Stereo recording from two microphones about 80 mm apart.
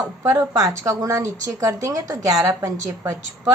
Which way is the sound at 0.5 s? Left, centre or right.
Right.